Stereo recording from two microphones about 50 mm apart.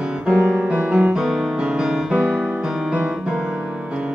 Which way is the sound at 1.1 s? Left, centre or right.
Centre.